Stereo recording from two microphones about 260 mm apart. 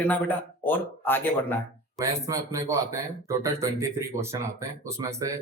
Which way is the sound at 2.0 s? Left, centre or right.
Centre.